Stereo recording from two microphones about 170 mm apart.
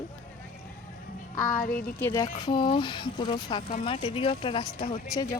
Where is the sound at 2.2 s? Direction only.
25° left (ahead or behind).